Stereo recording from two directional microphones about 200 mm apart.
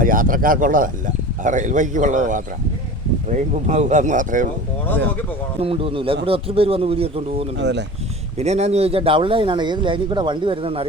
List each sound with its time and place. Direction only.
0.0 s speech: 45° right (ahead or behind)
5.5 s speech: 30° right (ahead or behind)
7.6 s speech: 60° right (ahead or behind)
8.4 s speech: 35° right (ahead or behind)